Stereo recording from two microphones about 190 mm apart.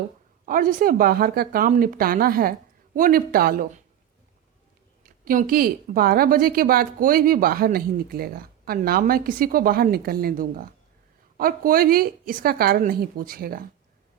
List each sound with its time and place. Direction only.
0.4 s a woman's voice: 45° right (ahead or behind)
5.0 s a woman's voice: 50° right (ahead or behind)